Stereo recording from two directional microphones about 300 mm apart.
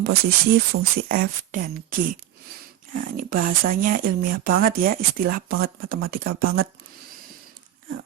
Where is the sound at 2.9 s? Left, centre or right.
Right.